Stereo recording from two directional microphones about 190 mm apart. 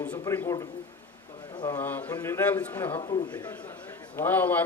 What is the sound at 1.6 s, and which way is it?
A man's voice, 15° left (ahead or behind).